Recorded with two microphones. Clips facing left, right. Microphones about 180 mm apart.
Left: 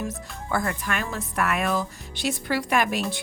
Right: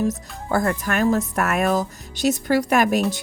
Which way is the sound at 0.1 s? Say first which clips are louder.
Right 5 dB; 40° right (ahead or behind).